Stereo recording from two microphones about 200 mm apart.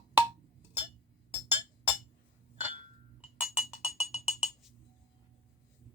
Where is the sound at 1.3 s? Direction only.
10° right (ahead or behind).